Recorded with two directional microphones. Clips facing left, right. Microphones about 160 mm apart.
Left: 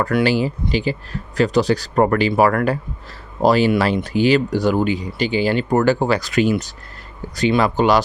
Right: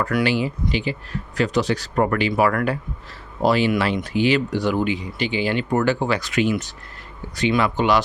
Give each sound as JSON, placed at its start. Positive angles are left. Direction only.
{"t": 0.0, "sound": "speech", "side_deg": 30}